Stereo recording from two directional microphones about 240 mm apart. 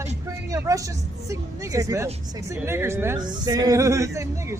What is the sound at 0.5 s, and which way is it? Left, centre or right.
Speech, centre.